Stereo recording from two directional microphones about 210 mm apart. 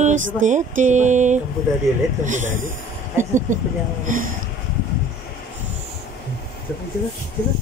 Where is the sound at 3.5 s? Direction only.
40° right (ahead or behind).